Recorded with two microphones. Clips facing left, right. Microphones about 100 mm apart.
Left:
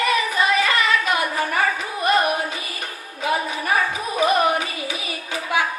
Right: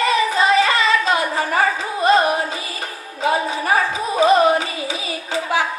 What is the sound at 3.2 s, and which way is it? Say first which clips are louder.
Music: right 4 dB; 25° right (ahead or behind).